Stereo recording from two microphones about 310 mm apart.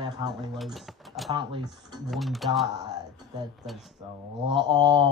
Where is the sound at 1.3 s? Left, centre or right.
Centre.